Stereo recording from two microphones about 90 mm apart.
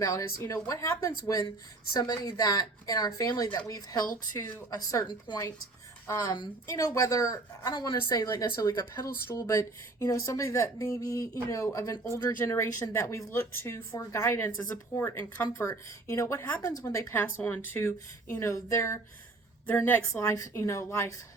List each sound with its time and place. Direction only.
0.0 s a woman's voice: 40° left (ahead or behind)
6.1 s a woman's voice: 45° left (ahead or behind)
6.7 s speech: 40° left (ahead or behind)
7.8 s a woman's voice: 50° left (ahead or behind); by 17.2 s 35° left (ahead or behind)
17.2 s a woman's voice: 20° left (ahead or behind)
19.6 s a woman's voice: 20° left (ahead or behind)
20.1 s speech: 35° left (ahead or behind)